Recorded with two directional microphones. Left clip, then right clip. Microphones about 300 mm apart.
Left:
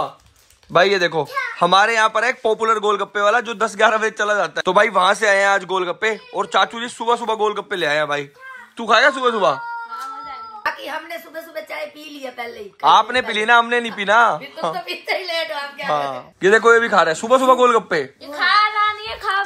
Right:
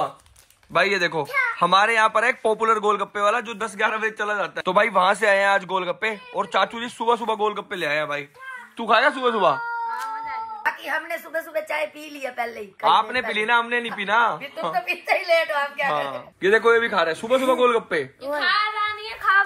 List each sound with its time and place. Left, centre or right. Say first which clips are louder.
0.7 s speech: left 5 dB; centre
11.7 s speech: right 2 dB; centre
18.4 s child singing: left 7 dB; centre